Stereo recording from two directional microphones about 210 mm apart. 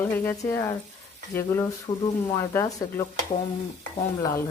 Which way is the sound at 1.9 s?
25° left (ahead or behind).